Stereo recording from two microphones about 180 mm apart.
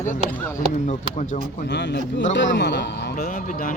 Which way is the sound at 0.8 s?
45° left (ahead or behind).